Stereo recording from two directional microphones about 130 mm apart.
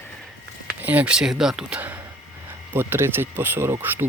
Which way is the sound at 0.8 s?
10° right (ahead or behind).